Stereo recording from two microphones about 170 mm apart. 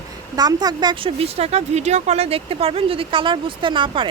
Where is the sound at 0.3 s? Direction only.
25° right (ahead or behind).